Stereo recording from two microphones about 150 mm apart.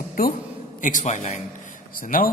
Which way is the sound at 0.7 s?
60° left (ahead or behind).